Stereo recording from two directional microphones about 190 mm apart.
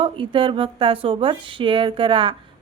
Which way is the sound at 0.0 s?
25° right (ahead or behind).